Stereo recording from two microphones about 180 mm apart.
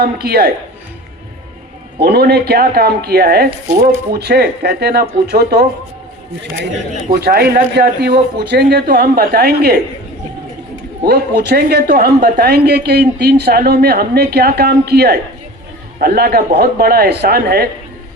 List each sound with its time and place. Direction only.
0.0 s speech: 60° right (ahead or behind)
2.0 s speech: 65° right (ahead or behind)
7.1 s speech: 60° right (ahead or behind)
11.1 s speech: 65° right (ahead or behind)